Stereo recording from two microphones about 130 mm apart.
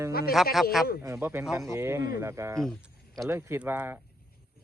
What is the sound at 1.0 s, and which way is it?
Speech, 20° right (ahead or behind).